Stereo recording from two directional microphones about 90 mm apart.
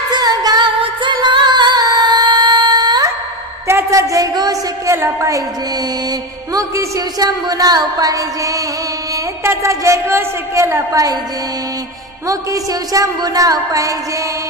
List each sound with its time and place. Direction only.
0.1 s female singing: 45° right (ahead or behind)
0.7 s music: 60° right (ahead or behind)
3.6 s a sound: 35° right (ahead or behind)
4.8 s music: 30° right (ahead or behind)
12.3 s music: 40° right (ahead or behind)